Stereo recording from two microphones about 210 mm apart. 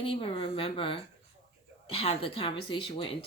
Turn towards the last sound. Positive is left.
turn(degrees=25)  # may be behind; listen again after turning